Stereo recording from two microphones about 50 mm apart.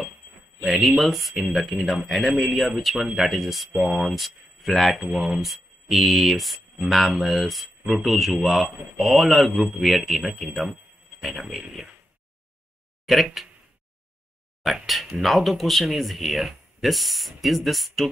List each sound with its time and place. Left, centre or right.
0.7 s speech: centre
10.5 s speech: right
11.1 s speech: centre
13.0 s speech: centre
14.6 s speech: centre